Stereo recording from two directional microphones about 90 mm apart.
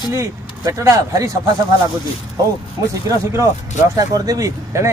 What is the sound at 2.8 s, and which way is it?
Speech, 40° right (ahead or behind).